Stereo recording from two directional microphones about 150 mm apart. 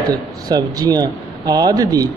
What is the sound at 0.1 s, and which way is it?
Speech, 25° right (ahead or behind).